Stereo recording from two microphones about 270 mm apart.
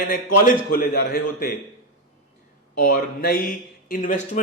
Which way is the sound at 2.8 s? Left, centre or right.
Left.